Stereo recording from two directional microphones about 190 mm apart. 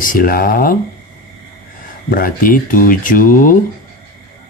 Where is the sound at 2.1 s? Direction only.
50° left (ahead or behind).